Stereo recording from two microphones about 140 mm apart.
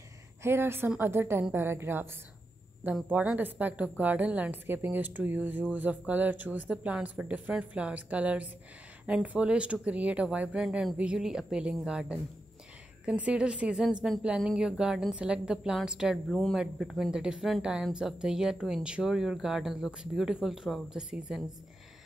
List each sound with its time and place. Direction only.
0.4 s a woman's voice: 15° right (ahead or behind)